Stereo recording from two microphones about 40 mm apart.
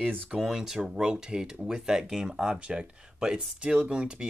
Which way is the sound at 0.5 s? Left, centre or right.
Centre.